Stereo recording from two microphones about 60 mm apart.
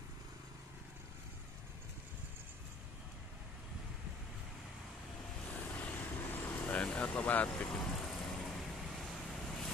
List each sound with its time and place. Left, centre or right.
5.5 s vehicle: left
7.4 s vehicle: centre